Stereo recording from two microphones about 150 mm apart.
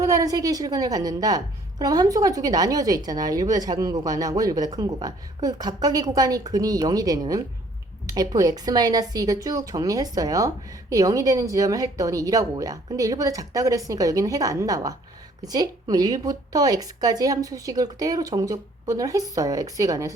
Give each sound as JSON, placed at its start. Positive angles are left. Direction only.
{"t": 0.0, "sound": "a woman's voice", "side_deg": -25}